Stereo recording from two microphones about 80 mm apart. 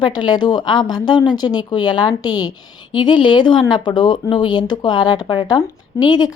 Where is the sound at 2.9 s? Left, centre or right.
Left.